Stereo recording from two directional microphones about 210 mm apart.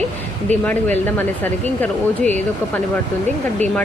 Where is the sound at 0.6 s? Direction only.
10° left (ahead or behind).